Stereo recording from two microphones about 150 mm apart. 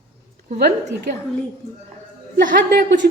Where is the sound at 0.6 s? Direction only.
90° right.